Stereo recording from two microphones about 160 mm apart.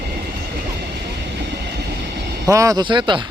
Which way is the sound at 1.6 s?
90° right.